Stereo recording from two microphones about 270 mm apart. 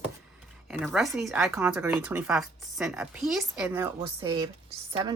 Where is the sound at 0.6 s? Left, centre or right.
Centre.